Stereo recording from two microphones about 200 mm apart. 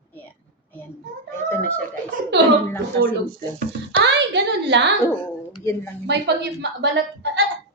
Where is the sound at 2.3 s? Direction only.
60° right (ahead or behind).